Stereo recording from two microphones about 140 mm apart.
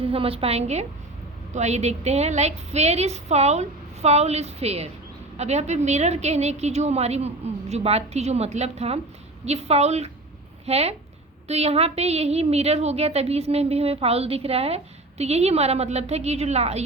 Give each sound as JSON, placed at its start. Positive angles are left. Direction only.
{"t": 0.0, "sound": "a woman's voice", "side_deg": -40}